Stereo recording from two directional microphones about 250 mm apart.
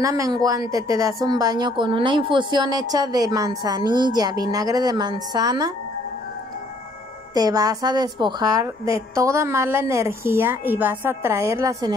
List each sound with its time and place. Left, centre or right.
0.0 s a woman's voice: centre
7.3 s a woman's voice: centre